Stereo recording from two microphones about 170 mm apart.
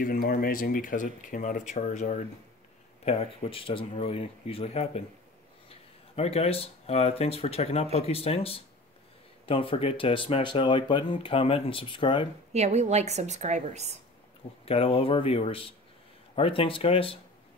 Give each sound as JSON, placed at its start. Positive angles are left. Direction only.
{"t": 0.0, "sound": "speech", "side_deg": 55}
{"t": 3.1, "sound": "speech", "side_deg": 35}
{"t": 12.5, "sound": "a woman's voice", "side_deg": -40}
{"t": 14.6, "sound": "speech", "side_deg": 35}